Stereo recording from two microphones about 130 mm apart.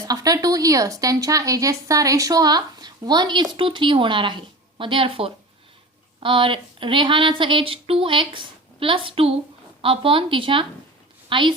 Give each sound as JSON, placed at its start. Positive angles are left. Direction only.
{"t": 0.0, "sound": "a woman's voice", "side_deg": -30}